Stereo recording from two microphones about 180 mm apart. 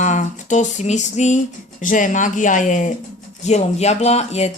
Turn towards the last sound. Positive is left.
turn(degrees=35)  # may be behind; listen again after turning